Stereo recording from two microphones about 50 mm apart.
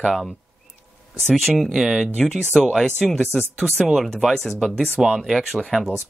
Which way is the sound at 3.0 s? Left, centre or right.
Centre.